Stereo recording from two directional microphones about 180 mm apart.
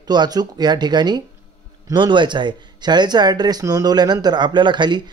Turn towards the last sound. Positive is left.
turn(degrees=-25)  # may be behind; listen again after turning